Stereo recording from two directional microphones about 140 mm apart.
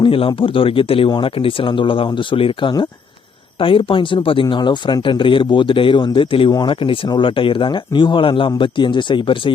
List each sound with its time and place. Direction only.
0.0 s speech: 40° left (ahead or behind)